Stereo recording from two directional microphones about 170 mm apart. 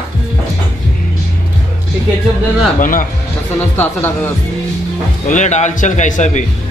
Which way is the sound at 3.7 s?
15° left (ahead or behind).